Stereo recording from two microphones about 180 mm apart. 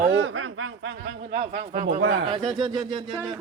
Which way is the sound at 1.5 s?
45° right (ahead or behind).